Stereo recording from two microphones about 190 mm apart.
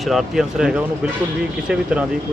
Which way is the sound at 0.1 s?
Centre (ahead or behind).